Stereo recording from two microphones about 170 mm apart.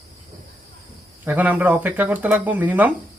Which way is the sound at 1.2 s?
10° right (ahead or behind).